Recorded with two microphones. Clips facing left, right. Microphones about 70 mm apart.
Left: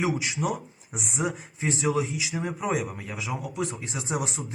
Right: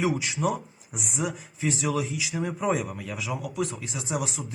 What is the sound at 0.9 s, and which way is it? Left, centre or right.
Speech, left.